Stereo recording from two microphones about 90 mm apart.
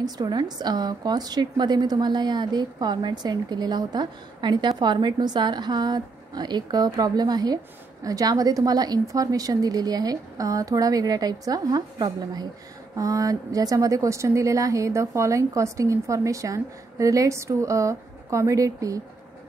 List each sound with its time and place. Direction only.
0.0 s a woman's voice: 50° right (ahead or behind)